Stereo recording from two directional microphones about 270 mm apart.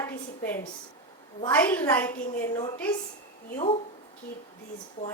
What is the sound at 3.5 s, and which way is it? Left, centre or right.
Speech, left.